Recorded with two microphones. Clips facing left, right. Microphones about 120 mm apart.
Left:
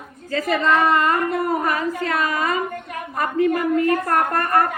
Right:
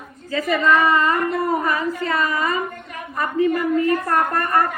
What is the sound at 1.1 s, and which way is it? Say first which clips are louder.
A woman's voice: even; 55° left (ahead or behind).